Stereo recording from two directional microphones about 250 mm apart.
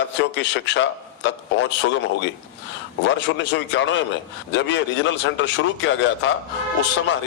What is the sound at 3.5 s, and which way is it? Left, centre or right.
A man's voice, left.